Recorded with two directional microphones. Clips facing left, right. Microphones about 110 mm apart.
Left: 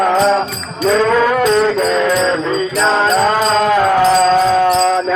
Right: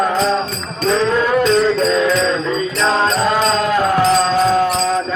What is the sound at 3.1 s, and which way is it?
Music, 90° left.